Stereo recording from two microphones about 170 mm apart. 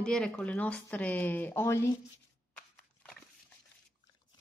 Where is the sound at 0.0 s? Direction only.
5° left (ahead or behind).